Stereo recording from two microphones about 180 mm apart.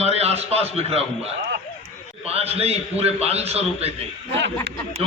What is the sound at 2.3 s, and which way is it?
A man's voice, 35° right (ahead or behind).